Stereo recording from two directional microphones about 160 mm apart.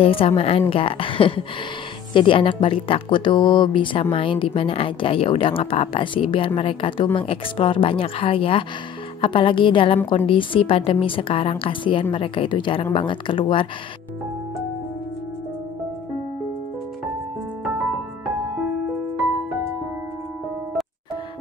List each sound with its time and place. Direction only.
0.0 s speech: 35° left (ahead or behind)